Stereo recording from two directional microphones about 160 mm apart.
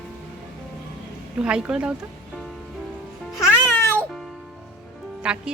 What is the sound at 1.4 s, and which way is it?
Speech, 5° right (ahead or behind).